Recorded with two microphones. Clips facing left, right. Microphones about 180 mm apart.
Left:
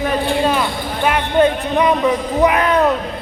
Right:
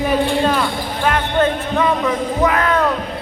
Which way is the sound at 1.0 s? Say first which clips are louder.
Left 3 dB; 10° left (ahead or behind).